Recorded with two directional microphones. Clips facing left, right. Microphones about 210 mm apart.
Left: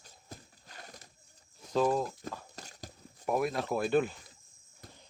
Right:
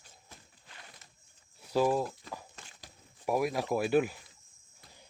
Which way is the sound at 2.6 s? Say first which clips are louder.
Left 6 dB; 40° left (ahead or behind).